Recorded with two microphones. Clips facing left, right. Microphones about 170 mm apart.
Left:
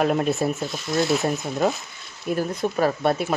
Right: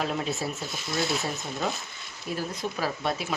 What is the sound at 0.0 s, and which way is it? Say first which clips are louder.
Speech: left 8 dB; 55° left (ahead or behind).